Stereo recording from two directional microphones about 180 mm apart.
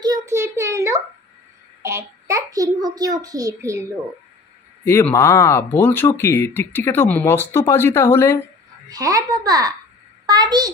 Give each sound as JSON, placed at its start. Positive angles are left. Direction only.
{"t": 0.0, "sound": "child singing", "side_deg": -20}
{"t": 1.8, "sound": "a child's voice", "side_deg": -15}
{"t": 4.8, "sound": "speech", "side_deg": 15}
{"t": 8.8, "sound": "a child's voice", "side_deg": -20}